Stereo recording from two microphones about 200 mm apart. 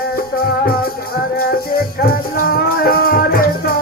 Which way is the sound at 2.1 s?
50° left (ahead or behind).